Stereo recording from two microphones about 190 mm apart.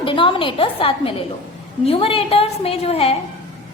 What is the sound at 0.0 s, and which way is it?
A woman's voice, 25° left (ahead or behind).